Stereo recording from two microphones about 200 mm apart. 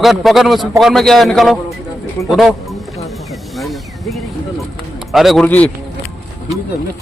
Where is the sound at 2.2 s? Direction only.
15° left (ahead or behind).